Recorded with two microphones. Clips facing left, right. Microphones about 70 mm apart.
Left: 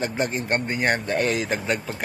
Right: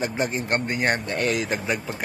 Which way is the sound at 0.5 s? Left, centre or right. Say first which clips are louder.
Even; centre.